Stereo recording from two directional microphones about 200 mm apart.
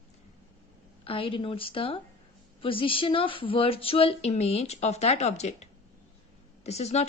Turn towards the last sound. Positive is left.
turn(degrees=30)  # may be behind; listen again after turning